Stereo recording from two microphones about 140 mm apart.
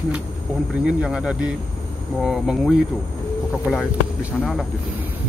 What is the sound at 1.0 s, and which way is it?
Speech, 5° right (ahead or behind).